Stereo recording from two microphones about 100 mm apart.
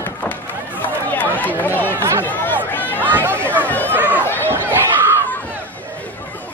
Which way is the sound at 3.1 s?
20° right (ahead or behind).